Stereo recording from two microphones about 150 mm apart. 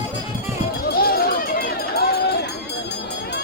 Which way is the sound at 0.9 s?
90° left.